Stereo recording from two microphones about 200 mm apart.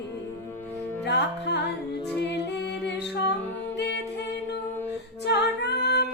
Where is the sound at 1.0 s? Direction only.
60° left (ahead or behind).